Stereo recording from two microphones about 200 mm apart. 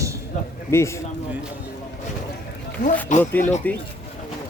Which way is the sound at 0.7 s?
15° left (ahead or behind).